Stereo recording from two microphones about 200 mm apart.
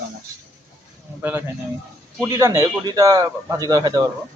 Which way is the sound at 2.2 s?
15° right (ahead or behind).